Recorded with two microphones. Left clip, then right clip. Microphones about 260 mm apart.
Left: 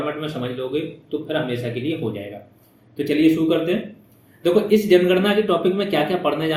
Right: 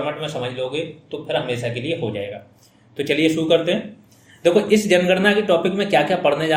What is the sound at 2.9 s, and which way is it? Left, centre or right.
A man's voice, right.